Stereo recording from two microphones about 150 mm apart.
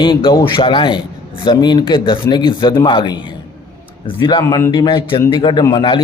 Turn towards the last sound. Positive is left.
turn(degrees=35)  # may be behind; listen again after turning